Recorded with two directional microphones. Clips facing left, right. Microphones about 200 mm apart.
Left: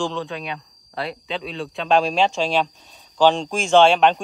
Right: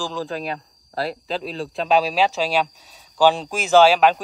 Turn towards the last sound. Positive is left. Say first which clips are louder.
# even
turn(degrees=-5)  # may be behind; listen again after turning